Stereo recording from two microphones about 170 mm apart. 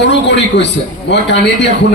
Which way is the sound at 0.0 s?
90° left.